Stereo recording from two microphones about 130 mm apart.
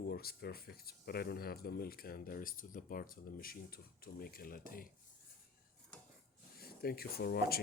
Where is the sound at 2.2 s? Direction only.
90° left.